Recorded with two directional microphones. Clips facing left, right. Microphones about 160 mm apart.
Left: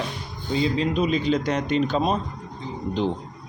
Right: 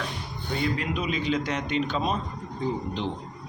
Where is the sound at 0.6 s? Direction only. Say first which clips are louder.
Left 5 dB; 25° left (ahead or behind); by 2.2 s 40° left (ahead or behind).